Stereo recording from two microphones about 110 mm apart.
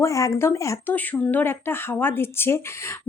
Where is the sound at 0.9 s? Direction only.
15° left (ahead or behind).